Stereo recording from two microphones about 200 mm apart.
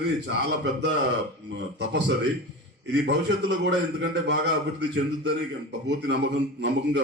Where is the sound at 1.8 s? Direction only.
60° right (ahead or behind).